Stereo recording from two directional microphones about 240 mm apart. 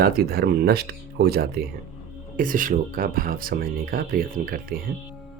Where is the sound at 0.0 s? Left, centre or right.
Right.